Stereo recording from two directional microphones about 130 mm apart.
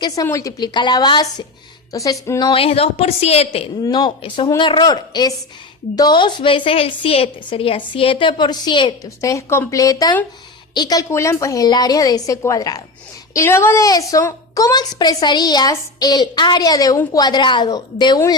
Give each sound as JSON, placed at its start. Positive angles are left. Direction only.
{"t": 0.3, "sound": "a woman's voice", "side_deg": 25}
{"t": 2.5, "sound": "a woman's voice", "side_deg": 45}
{"t": 3.8, "sound": "a woman's voice", "side_deg": 35}
{"t": 9.0, "sound": "a woman's voice", "side_deg": 25}